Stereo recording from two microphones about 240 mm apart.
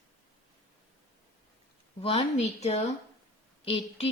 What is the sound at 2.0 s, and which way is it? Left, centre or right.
A woman's voice, left.